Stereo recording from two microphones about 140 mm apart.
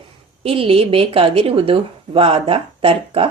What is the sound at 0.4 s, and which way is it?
A woman's voice, 40° right (ahead or behind).